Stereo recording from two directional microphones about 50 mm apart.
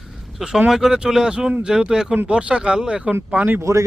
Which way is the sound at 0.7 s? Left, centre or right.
Centre.